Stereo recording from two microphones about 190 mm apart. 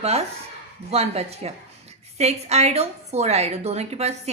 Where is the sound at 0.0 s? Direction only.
35° right (ahead or behind).